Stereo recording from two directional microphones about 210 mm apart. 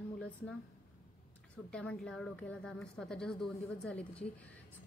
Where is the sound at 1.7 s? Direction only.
5° left (ahead or behind).